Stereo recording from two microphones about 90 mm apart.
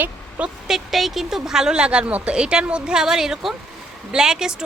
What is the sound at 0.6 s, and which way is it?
A woman's voice, 5° right (ahead or behind).